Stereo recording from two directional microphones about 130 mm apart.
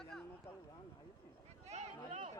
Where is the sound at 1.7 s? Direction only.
60° right (ahead or behind).